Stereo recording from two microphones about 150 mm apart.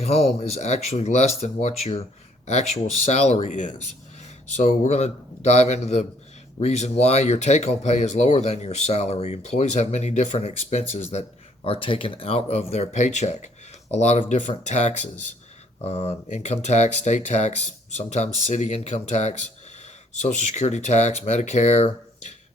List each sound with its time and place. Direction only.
0.0 s speech: 45° left (ahead or behind)